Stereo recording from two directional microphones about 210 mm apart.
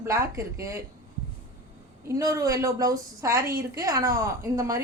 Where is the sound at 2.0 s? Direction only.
15° right (ahead or behind).